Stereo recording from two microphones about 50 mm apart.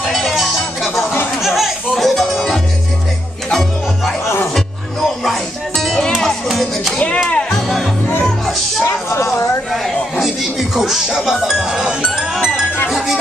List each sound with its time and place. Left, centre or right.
0.0 s music: centre
1.4 s a sound: centre
2.0 s music: centre
5.2 s music: centre
7.2 s music: centre
7.6 s music: centre
8.8 s a sound: left
10.2 s music: centre